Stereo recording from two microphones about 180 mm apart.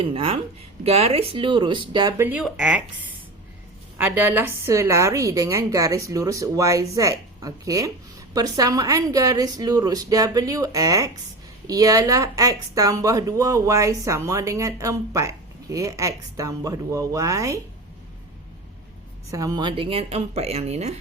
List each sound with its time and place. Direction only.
0.0 s a woman's voice: 30° right (ahead or behind)
2.1 s speech: 10° right (ahead or behind)
3.9 s a woman's voice: 10° right (ahead or behind)
19.3 s speech: 20° right (ahead or behind); by 21.0 s 35° right (ahead or behind)